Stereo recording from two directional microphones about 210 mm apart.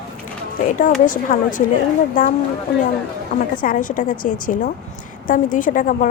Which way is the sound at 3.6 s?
40° left (ahead or behind).